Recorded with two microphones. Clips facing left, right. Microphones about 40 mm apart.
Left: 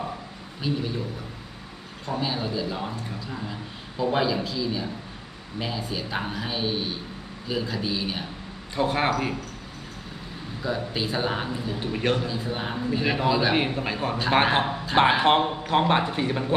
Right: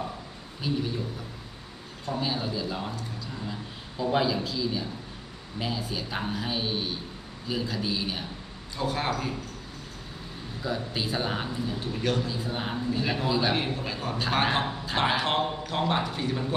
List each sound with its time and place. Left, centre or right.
0.6 s a man's voice: centre
2.0 s a man's voice: centre
8.7 s a man's voice: left
10.6 s a man's voice: centre
11.8 s a man's voice: left
12.3 s a man's voice: centre
13.2 s a man's voice: centre
13.5 s a man's voice: left